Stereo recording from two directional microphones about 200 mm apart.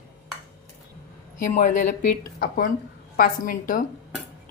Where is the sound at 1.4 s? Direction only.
40° left (ahead or behind).